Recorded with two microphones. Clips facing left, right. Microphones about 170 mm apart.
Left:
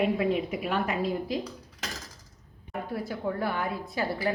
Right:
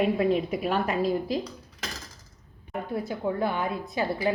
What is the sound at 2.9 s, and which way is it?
A woman's voice, 20° right (ahead or behind).